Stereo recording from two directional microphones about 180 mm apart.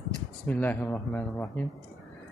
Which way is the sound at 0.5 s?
10° left (ahead or behind).